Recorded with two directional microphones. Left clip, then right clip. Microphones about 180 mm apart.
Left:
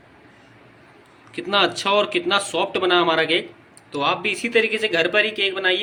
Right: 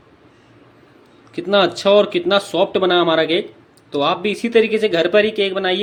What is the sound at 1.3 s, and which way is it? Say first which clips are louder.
Speech: right 4 dB; 40° right (ahead or behind).